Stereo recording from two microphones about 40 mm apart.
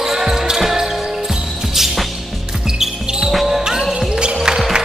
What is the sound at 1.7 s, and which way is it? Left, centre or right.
Music, centre.